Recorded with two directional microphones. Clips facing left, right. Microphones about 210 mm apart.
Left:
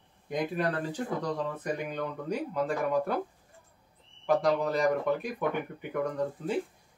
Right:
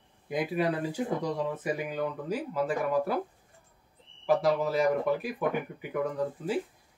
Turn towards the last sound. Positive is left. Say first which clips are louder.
# even
turn(degrees=-5)  # may be behind; listen again after turning